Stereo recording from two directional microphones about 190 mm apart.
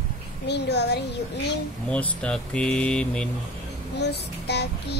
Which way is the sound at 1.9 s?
5° left (ahead or behind).